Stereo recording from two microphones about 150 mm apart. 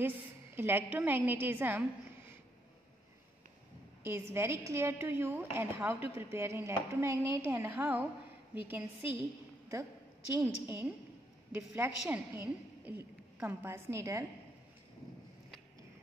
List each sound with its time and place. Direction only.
0.6 s a woman's voice: 15° right (ahead or behind)
4.0 s a woman's voice: 15° right (ahead or behind)
10.4 s a woman's voice: 15° right (ahead or behind)